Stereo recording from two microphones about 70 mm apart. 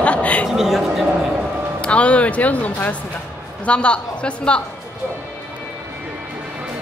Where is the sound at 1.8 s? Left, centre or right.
Centre.